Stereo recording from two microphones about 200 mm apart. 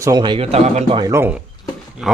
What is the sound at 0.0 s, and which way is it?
Speech, 20° right (ahead or behind).